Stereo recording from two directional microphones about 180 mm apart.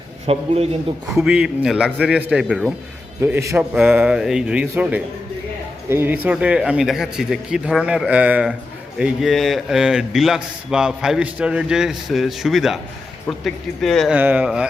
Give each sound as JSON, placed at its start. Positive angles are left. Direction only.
{"t": 0.3, "sound": "a man's voice", "side_deg": -35}
{"t": 1.1, "sound": "a man's voice", "side_deg": -5}
{"t": 14.2, "sound": "a man's voice", "side_deg": -10}